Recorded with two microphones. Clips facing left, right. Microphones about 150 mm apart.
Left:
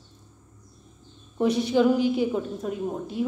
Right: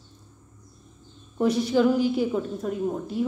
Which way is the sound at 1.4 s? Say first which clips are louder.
Even; 20° left (ahead or behind).